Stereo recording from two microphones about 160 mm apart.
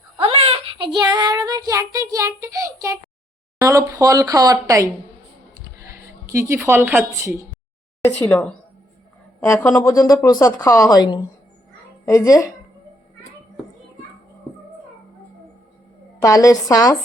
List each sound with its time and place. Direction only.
0.2 s child singing: 40° right (ahead or behind); by 3.0 s 20° right (ahead or behind)
3.6 s speech: 20° right (ahead or behind)
5.5 s a sound: 20° right (ahead or behind)
8.0 s speech: 15° left (ahead or behind)
16.2 s speech: 20° left (ahead or behind)